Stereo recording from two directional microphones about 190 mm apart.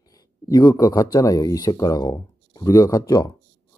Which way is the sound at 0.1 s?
20° left (ahead or behind).